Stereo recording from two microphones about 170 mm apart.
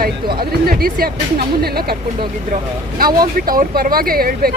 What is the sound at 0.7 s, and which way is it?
Speech, 60° right (ahead or behind).